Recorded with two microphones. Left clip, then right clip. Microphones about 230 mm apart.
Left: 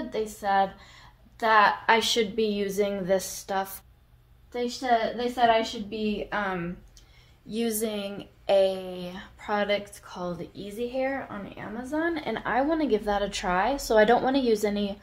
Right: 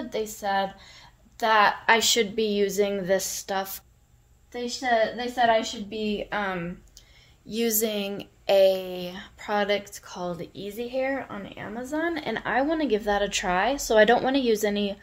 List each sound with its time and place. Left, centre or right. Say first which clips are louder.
0.1 s speech: left 1 dB; right